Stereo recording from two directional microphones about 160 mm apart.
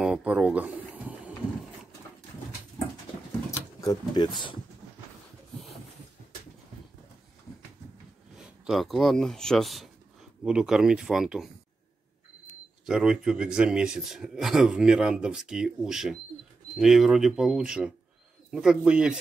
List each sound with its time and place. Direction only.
0.0 s a sound: 5° right (ahead or behind)
3.8 s speech: 25° left (ahead or behind)
8.4 s a man's voice: 5° right (ahead or behind)
12.8 s a man's voice: 5° right (ahead or behind)